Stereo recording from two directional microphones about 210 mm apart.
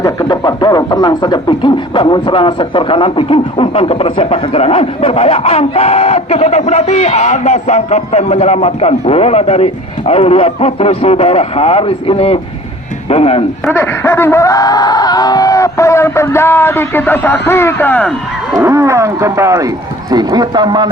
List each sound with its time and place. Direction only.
0.0 s speech: 20° left (ahead or behind)
13.7 s a sound: 10° left (ahead or behind)
18.5 s speech: 15° right (ahead or behind)